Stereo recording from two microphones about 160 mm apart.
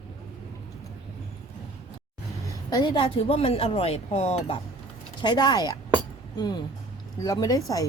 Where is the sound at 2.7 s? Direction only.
30° left (ahead or behind).